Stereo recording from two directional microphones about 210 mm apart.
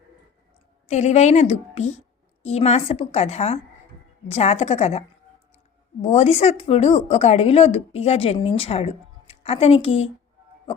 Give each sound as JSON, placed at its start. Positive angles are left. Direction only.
{"t": 0.9, "sound": "a woman's voice", "side_deg": 35}